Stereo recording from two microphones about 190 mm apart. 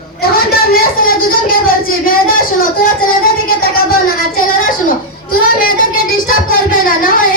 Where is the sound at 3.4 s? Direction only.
50° left (ahead or behind).